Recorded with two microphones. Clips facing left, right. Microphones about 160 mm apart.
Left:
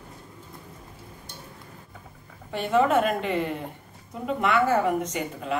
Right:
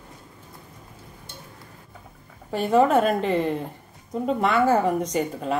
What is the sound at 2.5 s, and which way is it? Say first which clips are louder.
Speech: right 3 dB; 40° right (ahead or behind).